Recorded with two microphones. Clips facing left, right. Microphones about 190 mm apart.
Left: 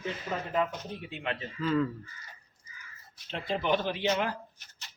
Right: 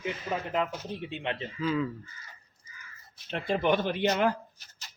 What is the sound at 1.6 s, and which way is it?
Speech, centre (ahead or behind).